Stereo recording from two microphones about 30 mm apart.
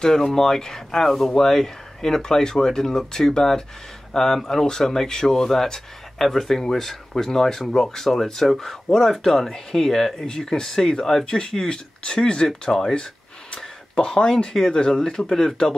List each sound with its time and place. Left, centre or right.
0.0 s speech: centre
13.9 s speech: left